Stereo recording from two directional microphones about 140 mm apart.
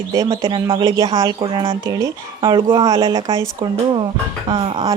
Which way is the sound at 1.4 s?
35° right (ahead or behind).